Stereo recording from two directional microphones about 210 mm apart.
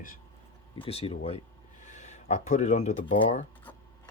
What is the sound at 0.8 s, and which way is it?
Speech, 30° left (ahead or behind).